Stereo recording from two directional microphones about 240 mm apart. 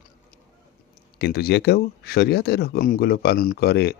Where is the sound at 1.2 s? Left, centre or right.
Left.